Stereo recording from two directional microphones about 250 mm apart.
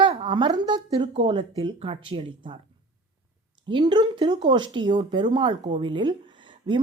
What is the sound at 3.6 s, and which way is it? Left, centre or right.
Speech, centre.